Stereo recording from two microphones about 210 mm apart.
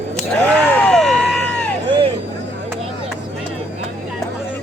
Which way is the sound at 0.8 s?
5° left (ahead or behind).